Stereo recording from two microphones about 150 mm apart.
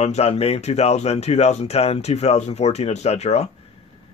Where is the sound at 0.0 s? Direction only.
45° left (ahead or behind).